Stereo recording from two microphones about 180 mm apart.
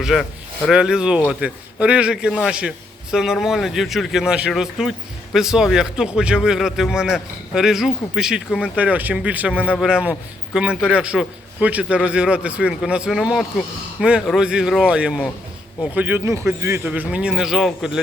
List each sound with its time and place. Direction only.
0.0 s a man's voice: centre (ahead or behind)